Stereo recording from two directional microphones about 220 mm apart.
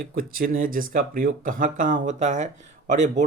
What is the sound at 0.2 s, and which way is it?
Speech, 40° right (ahead or behind).